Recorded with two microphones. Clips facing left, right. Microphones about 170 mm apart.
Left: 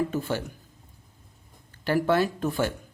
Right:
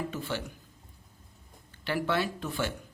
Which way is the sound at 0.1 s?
45° left (ahead or behind).